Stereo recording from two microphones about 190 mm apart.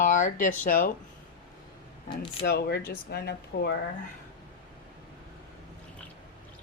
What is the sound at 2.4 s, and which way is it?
Speech, 55° left (ahead or behind).